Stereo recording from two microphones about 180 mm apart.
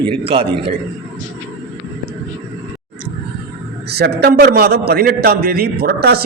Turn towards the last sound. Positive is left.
turn(degrees=-60)  # may be behind; listen again after turning